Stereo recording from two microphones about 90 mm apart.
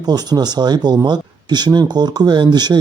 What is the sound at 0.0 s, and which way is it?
Speech, 50° right (ahead or behind).